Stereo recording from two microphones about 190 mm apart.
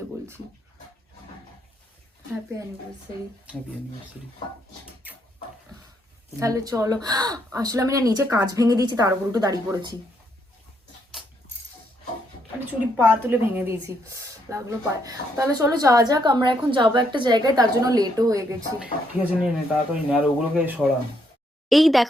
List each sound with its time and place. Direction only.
6.4 s speech: 20° right (ahead or behind)
12.5 s speech: 10° right (ahead or behind)
18.8 s speech: 5° right (ahead or behind)